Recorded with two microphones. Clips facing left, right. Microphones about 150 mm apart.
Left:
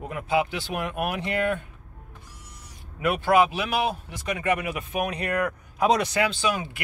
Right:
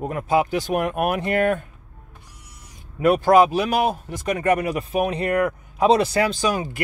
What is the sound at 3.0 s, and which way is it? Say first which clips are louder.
Speech: right 6 dB; 40° right (ahead or behind).